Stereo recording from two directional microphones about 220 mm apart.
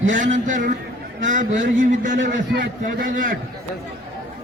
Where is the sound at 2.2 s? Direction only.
50° right (ahead or behind).